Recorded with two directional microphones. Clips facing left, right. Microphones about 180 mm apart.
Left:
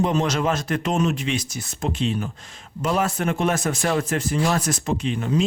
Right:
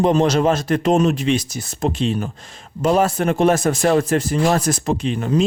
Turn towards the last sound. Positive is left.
turn(degrees=-40)  # may be behind; listen again after turning